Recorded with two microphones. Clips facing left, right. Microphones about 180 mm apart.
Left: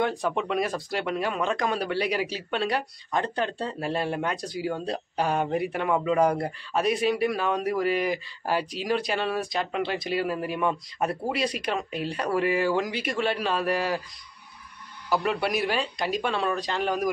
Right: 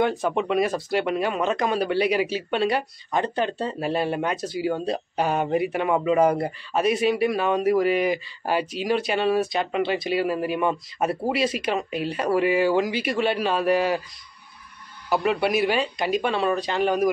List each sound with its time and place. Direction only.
0.0 s speech: centre (ahead or behind)
15.0 s speech: centre (ahead or behind)